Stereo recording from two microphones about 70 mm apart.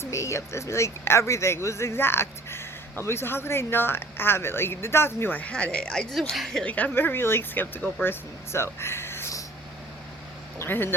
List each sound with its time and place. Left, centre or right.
0.0 s speech: left
5.4 s a woman's voice: centre
6.7 s speech: left
10.6 s speech: left